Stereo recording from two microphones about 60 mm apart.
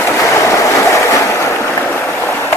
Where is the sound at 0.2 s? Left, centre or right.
Left.